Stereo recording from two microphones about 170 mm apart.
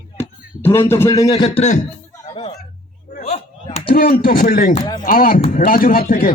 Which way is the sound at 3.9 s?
60° left (ahead or behind).